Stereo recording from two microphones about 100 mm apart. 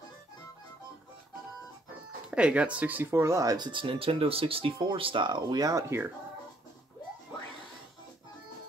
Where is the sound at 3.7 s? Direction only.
60° right (ahead or behind); by 6.1 s 30° right (ahead or behind).